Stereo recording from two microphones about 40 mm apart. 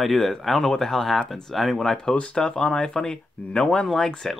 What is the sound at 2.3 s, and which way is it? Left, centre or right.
Speech, left.